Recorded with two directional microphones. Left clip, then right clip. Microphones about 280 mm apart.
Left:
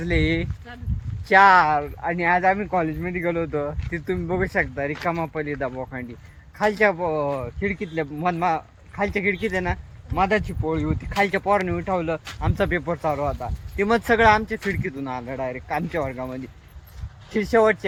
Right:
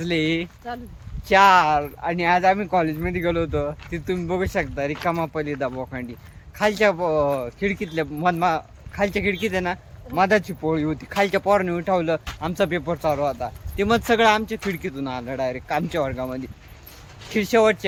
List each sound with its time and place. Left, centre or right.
0.0 s speech: centre
0.7 s speech: centre
1.3 s speech: centre